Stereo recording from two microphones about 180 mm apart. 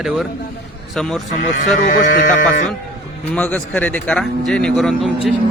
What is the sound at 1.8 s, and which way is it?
Music, 45° left (ahead or behind).